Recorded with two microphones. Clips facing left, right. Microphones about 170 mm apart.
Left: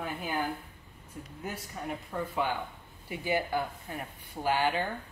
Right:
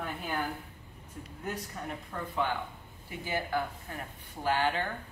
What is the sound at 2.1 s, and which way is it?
Speech, 10° left (ahead or behind).